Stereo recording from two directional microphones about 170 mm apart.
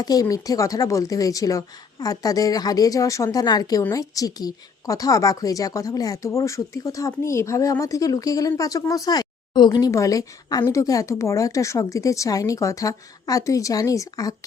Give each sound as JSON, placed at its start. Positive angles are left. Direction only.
{"t": 0.0, "sound": "speech", "side_deg": 20}